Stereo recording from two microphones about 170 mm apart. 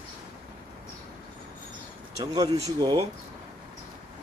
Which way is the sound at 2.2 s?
20° right (ahead or behind).